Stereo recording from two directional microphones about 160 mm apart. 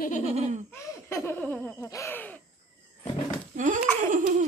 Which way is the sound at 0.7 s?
15° left (ahead or behind).